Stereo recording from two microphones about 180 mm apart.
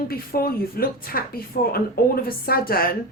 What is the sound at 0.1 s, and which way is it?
A woman's voice, 55° left (ahead or behind).